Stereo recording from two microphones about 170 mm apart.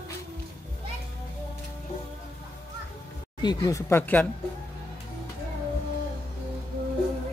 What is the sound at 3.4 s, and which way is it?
Speech, 20° left (ahead or behind).